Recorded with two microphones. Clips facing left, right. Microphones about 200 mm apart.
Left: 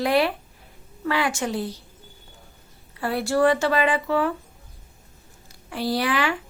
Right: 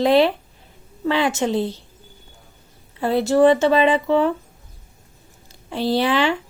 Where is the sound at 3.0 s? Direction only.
20° right (ahead or behind).